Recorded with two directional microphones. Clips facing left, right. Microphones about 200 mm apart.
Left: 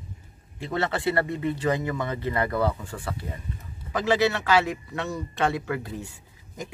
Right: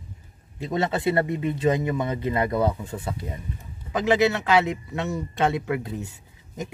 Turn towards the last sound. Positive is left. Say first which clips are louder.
# right 3 dB
turn(degrees=-20)  # may be behind; listen again after turning